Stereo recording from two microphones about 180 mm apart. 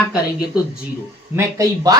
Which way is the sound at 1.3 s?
20° right (ahead or behind).